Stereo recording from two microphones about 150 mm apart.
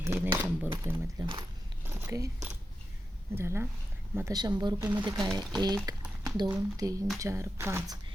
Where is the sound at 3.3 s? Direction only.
15° right (ahead or behind).